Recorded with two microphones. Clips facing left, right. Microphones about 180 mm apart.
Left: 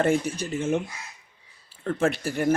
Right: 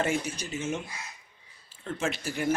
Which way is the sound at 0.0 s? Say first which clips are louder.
Left 6 dB; 55° left (ahead or behind).